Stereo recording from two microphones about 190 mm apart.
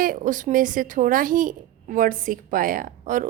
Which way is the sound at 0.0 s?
45° right (ahead or behind).